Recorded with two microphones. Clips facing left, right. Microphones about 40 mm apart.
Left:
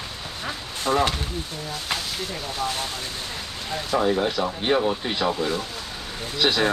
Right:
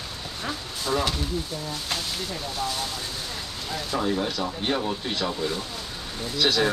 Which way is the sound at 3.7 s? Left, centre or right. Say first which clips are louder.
Left 4 dB; centre.